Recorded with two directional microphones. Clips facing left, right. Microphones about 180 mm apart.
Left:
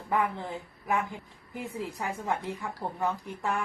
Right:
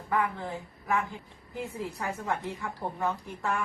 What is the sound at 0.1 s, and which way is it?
A woman's voice, 20° left (ahead or behind).